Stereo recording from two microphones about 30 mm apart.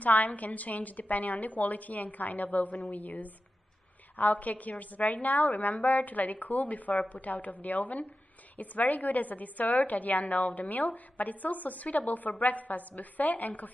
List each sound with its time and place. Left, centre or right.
0.0 s a woman's voice: left